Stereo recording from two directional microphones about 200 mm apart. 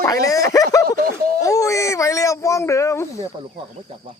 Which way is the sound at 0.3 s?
15° left (ahead or behind).